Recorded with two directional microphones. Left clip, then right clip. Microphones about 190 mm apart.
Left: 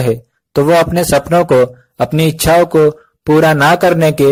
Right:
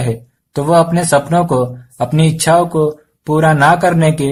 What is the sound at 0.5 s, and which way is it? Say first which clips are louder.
Speech: left 2 dB; 35° left (ahead or behind).